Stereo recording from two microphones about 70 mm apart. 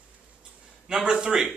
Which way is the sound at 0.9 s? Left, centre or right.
Centre.